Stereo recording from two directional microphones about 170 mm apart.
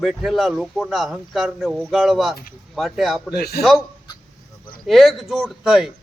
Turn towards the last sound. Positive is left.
turn(degrees=0)  # may be behind; listen again after turning